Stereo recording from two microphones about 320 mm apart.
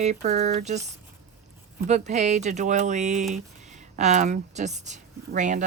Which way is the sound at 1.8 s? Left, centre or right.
Right.